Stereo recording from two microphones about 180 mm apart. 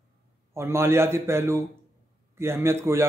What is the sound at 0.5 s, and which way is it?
A man's voice, 15° right (ahead or behind).